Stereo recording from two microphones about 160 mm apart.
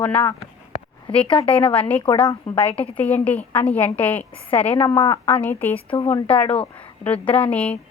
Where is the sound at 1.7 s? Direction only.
10° left (ahead or behind).